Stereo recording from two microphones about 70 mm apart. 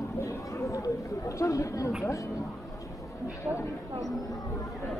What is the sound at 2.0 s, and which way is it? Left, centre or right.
Speech, left.